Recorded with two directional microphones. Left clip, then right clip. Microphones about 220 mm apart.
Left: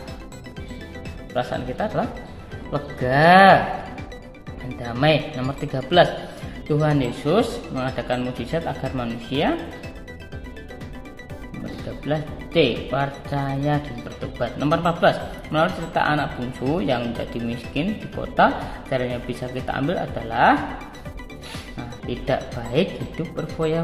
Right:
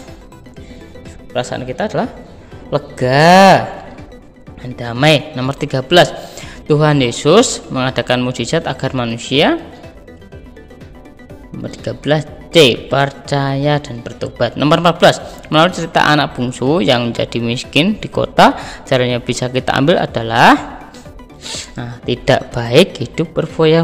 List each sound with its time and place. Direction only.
1.3 s speech: 35° right (ahead or behind)
4.7 s speech: 35° right (ahead or behind)
12.0 s speech: 40° right (ahead or behind)
21.7 s speech: 40° right (ahead or behind)